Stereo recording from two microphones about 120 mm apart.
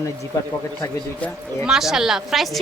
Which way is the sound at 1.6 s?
5° right (ahead or behind).